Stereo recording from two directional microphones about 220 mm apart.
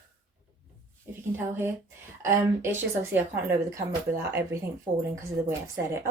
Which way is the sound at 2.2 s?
10° right (ahead or behind).